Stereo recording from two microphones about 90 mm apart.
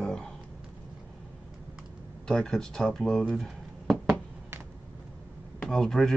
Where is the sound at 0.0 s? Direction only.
5° left (ahead or behind).